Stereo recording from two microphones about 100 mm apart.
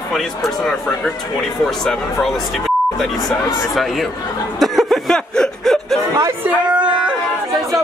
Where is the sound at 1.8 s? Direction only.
5° left (ahead or behind).